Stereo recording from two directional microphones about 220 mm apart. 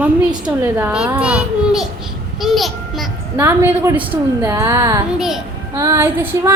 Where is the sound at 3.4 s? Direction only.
10° right (ahead or behind).